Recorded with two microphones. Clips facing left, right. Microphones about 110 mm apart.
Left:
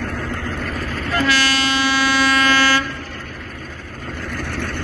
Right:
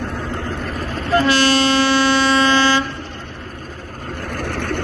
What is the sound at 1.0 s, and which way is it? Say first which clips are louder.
Train: right 4 dB; 30° right (ahead or behind).